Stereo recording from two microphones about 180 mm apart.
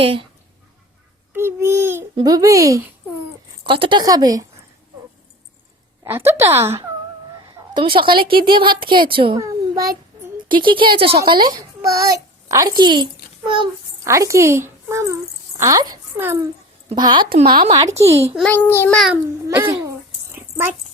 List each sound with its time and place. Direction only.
0.0 s speech: 30° right (ahead or behind)
1.3 s babbling: 15° right (ahead or behind)
2.1 s a woman's voice: 20° right (ahead or behind)
3.7 s a woman's voice: 30° right (ahead or behind)
6.1 s a child's voice: 15° right (ahead or behind)
7.7 s a woman's voice: 25° right (ahead or behind)
9.4 s child singing: 20° right (ahead or behind)
10.5 s a woman's voice: 25° right (ahead or behind)
14.1 s a child's voice: 15° right (ahead or behind)
16.9 s a woman's voice: 25° right (ahead or behind)
18.3 s a child's voice: 10° left (ahead or behind)
19.1 s a child's voice: 10° right (ahead or behind)
20.3 s a sound: 10° right (ahead or behind)